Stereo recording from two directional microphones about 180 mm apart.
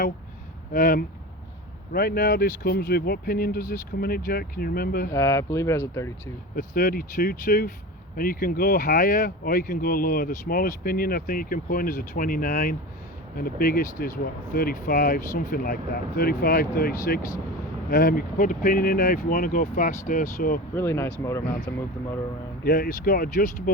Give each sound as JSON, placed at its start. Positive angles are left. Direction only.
{"t": 0.7, "sound": "speech", "side_deg": 50}
{"t": 5.1, "sound": "speech", "side_deg": 15}
{"t": 6.6, "sound": "speech", "side_deg": 55}
{"t": 20.7, "sound": "speech", "side_deg": 15}
{"t": 22.6, "sound": "speech", "side_deg": 55}